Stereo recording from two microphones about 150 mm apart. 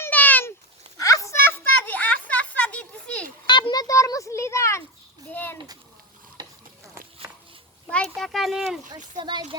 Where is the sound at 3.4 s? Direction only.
30° left (ahead or behind); by 5.6 s 15° left (ahead or behind).